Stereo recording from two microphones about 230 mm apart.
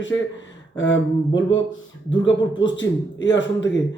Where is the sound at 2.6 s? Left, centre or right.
Left.